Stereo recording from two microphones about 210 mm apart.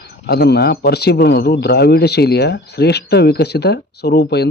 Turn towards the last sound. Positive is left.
turn(degrees=50)  # may be behind; listen again after turning